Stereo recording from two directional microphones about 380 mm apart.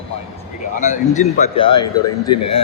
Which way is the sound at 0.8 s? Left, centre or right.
Centre.